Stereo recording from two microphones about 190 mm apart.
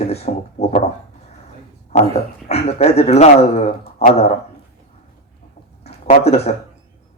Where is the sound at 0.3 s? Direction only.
35° left (ahead or behind).